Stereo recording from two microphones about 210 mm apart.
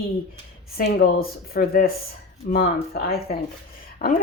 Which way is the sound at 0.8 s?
45° left (ahead or behind).